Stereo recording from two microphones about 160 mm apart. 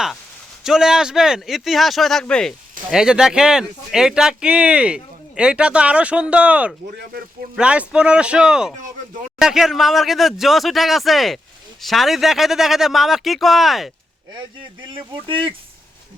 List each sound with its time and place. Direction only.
0.6 s speech: 5° right (ahead or behind)
14.8 s speech: 30° right (ahead or behind)